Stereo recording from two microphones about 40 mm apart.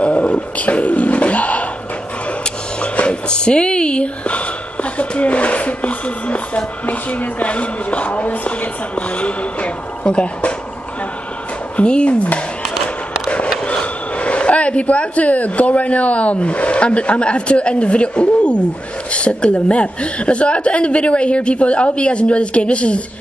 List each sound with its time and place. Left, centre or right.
0.0 s speech: left
2.4 s a sound: left
5.1 s speech: left
11.7 s speech: left
13.7 s a woman's voice: left